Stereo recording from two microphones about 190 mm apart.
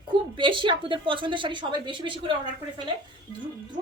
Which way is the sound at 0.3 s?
25° right (ahead or behind).